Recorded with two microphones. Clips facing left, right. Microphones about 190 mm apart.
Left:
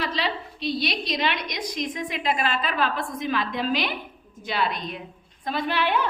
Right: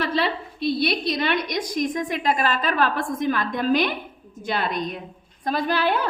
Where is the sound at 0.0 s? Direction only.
50° right (ahead or behind).